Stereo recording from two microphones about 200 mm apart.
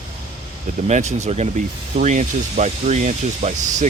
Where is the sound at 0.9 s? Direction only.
35° right (ahead or behind).